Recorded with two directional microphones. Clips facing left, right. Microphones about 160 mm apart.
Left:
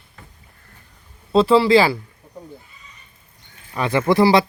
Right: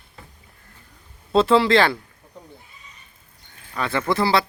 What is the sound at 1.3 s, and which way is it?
Speech, centre (ahead or behind).